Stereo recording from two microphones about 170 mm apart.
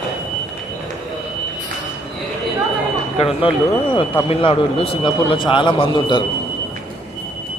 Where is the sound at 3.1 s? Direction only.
35° left (ahead or behind).